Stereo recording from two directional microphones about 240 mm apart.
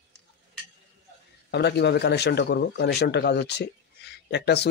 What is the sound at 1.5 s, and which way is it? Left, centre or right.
A man's voice, left.